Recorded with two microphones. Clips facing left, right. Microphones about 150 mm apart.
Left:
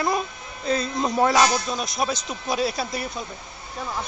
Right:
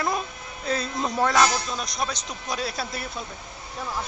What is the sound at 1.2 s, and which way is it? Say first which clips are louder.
Speech: left 2 dB; 10° left (ahead or behind).